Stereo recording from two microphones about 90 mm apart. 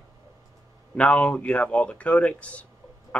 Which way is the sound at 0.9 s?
15° left (ahead or behind).